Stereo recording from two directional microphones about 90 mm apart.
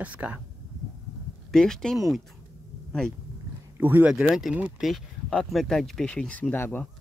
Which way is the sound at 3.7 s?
20° right (ahead or behind).